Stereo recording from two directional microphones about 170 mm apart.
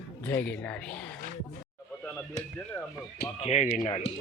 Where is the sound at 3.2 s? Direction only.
40° left (ahead or behind).